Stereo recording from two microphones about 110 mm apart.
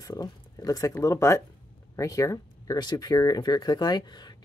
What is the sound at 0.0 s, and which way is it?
Speech, 35° left (ahead or behind).